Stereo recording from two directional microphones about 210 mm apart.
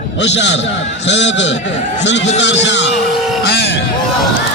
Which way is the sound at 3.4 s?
55° left (ahead or behind).